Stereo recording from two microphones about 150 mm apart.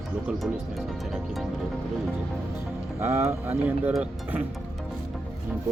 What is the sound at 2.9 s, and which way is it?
Speech, 15° right (ahead or behind).